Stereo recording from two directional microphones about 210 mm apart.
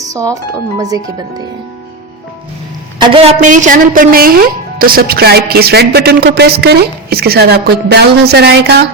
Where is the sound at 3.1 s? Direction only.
30° right (ahead or behind); by 8.8 s 50° right (ahead or behind).